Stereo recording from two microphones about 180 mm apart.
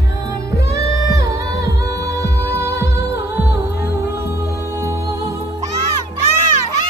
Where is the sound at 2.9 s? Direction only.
65° left (ahead or behind).